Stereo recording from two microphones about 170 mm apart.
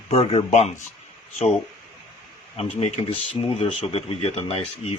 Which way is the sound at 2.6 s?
40° left (ahead or behind).